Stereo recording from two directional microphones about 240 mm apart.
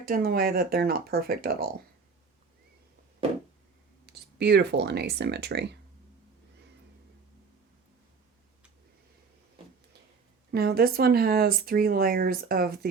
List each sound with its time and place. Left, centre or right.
0.0 s speech: right
4.0 s speech: right
10.5 s speech: right